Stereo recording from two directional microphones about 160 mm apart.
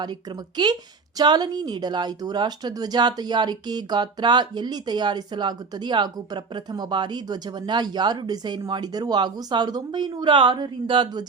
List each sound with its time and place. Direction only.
0.0 s speech: 25° right (ahead or behind)